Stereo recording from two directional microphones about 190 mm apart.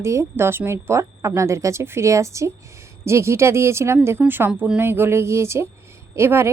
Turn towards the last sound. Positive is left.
turn(degrees=-15)  # may be behind; listen again after turning